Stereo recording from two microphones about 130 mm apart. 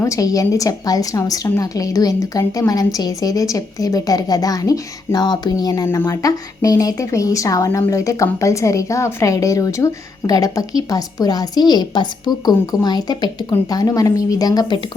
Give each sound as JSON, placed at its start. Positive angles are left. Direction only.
{"t": 0.0, "sound": "a woman's voice", "side_deg": 25}